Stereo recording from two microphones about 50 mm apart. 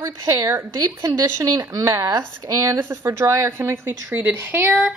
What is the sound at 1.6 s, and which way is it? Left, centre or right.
Speech, right.